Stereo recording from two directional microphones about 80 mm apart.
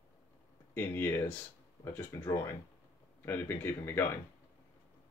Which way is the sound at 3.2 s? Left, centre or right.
Left.